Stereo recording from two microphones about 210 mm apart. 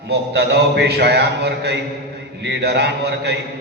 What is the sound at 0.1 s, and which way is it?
A man's voice, 50° right (ahead or behind).